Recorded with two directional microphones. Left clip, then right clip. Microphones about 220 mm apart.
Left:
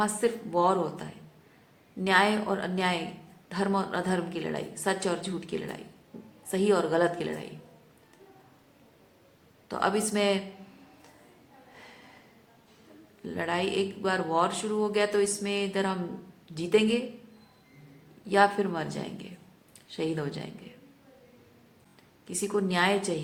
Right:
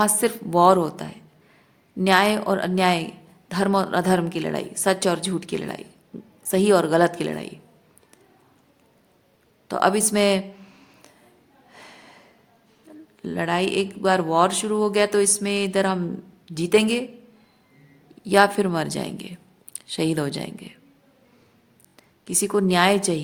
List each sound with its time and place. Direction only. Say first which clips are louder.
0.0 s a woman's voice: right 6 dB; 55° right (ahead or behind)
9.6 s speech: right 7 dB; 55° right (ahead or behind)
11.7 s snort: right 6 dB; 55° right (ahead or behind)
12.9 s a sound: right 10 dB; 50° right (ahead or behind)
13.2 s a woman's voice: right 6 dB; 55° right (ahead or behind)
18.3 s a woman's voice: right 6 dB; 55° right (ahead or behind)
22.3 s speech: right 8 dB; 55° right (ahead or behind)